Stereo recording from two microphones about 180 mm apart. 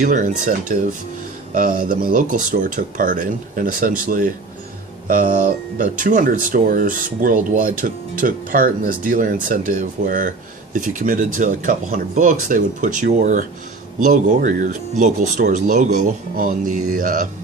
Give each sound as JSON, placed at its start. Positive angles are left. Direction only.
{"t": 0.0, "sound": "speech", "side_deg": -45}